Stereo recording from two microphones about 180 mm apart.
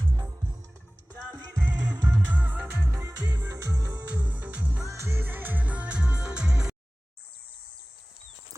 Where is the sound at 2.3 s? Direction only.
10° right (ahead or behind).